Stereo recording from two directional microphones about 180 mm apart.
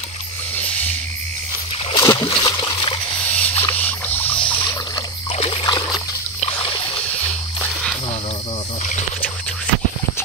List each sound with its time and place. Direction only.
1.9 s splash: 25° left (ahead or behind)
3.3 s rodents: 10° left (ahead or behind)
5.3 s splash: 30° left (ahead or behind)